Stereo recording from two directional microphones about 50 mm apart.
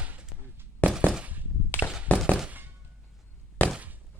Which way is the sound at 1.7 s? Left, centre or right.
Left.